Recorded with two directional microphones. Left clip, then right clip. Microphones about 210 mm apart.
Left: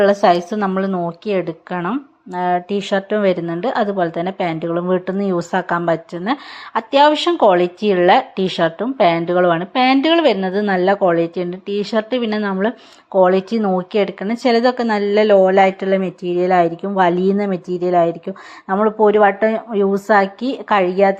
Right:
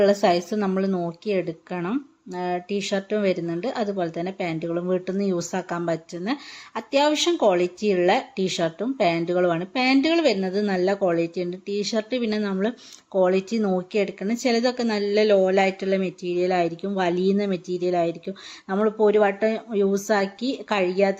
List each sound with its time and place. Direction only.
0.0 s speech: centre (ahead or behind)